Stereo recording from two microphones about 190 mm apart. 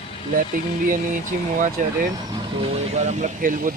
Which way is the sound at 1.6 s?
45° right (ahead or behind).